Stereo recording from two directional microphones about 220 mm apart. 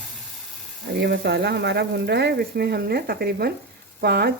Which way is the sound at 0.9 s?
50° right (ahead or behind).